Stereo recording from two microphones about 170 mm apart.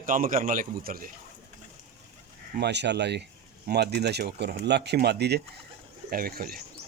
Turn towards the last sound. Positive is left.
turn(degrees=-60)  # may be behind; listen again after turning